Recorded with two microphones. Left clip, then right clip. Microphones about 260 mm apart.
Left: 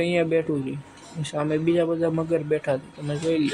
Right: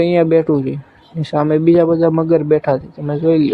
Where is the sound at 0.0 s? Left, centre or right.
Centre.